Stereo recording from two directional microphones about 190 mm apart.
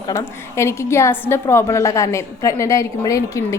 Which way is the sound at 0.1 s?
15° left (ahead or behind).